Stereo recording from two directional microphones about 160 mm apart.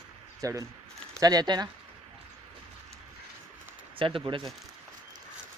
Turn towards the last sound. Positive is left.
turn(degrees=-30)  # may be behind; listen again after turning